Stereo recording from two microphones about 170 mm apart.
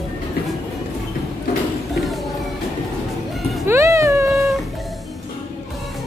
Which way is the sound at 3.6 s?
15° right (ahead or behind).